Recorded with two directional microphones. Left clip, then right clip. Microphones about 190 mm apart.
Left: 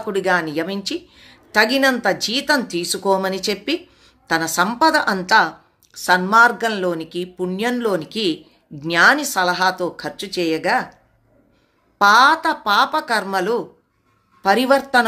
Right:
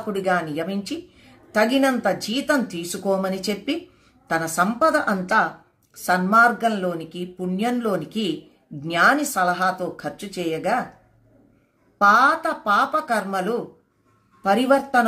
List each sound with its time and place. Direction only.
0.1 s a woman's voice: 10° left (ahead or behind)
12.0 s a woman's voice: 15° left (ahead or behind)